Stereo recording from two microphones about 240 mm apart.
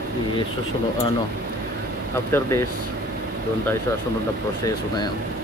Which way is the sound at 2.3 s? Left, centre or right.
Centre.